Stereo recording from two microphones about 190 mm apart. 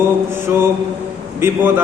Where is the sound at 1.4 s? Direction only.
15° right (ahead or behind).